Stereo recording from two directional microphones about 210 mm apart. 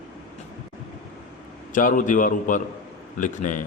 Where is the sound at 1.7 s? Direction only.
40° left (ahead or behind).